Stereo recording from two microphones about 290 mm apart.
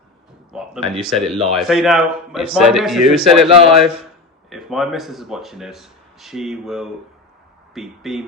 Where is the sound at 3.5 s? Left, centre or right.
Centre.